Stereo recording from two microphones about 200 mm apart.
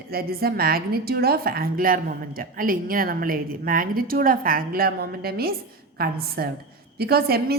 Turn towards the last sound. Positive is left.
turn(degrees=-50)  # may be behind; listen again after turning